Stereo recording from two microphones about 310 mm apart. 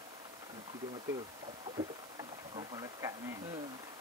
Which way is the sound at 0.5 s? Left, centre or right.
Centre.